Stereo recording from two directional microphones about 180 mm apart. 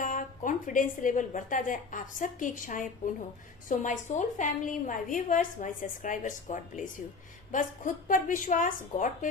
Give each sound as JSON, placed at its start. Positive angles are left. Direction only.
{"t": 0.0, "sound": "a woman's voice", "side_deg": 45}